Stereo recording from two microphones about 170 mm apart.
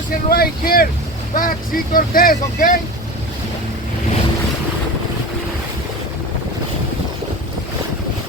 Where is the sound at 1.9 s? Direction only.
55° left (ahead or behind).